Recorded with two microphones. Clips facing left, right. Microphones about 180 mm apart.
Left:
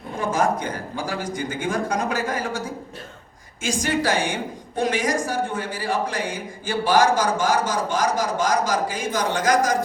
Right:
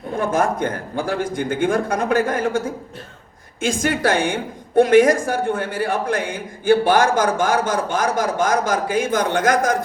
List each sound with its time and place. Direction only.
0.2 s a man's voice: 55° right (ahead or behind)